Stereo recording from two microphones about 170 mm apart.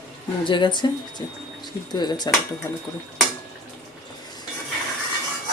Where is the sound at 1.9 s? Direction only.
25° left (ahead or behind).